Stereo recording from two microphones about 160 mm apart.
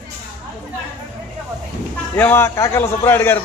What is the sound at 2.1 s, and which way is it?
A man's voice, 15° left (ahead or behind).